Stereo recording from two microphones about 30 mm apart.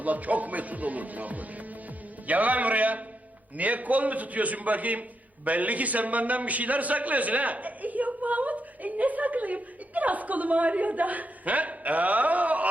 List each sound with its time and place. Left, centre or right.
0.0 s a man's voice: right